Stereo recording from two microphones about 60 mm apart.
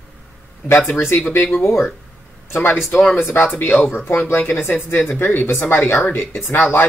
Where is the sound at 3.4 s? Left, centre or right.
Left.